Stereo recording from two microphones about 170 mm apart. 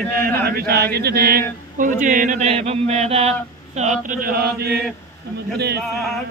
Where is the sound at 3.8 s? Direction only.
50° right (ahead or behind).